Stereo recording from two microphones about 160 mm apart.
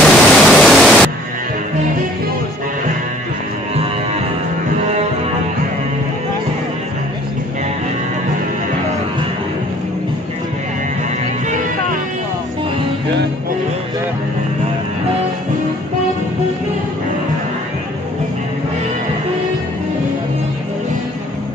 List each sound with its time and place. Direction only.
0.0 s pink noise: centre (ahead or behind)